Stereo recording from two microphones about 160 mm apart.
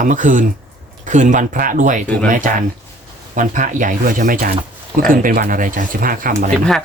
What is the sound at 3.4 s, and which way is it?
Speech, 55° right (ahead or behind).